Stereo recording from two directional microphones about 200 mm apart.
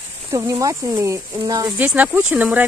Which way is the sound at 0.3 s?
15° right (ahead or behind).